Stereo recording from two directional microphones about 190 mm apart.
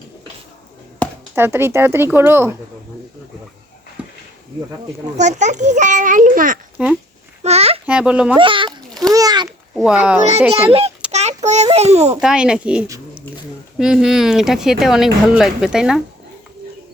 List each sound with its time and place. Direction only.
1.0 s chop: 10° left (ahead or behind)
1.4 s speech: 10° right (ahead or behind)
5.1 s a child's voice: 40° right (ahead or behind)
6.8 s speech: 5° right (ahead or behind)
7.4 s a sound: 35° right (ahead or behind)
7.9 s speech: 5° right (ahead or behind)
8.4 s a child's voice: 25° right (ahead or behind)
9.1 s a sound: 20° right (ahead or behind)
9.7 s speech: 5° right (ahead or behind)
10.7 s a child's voice: 30° right (ahead or behind)
11.1 s child singing: 35° right (ahead or behind)
11.4 s a child's voice: 35° right (ahead or behind)
12.2 s speech: 5° right (ahead or behind)